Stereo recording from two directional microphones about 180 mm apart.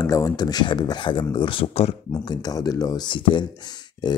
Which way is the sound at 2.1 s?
20° left (ahead or behind).